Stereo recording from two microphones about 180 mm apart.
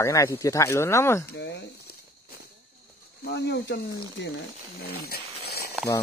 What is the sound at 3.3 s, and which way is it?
Speech, 70° left (ahead or behind).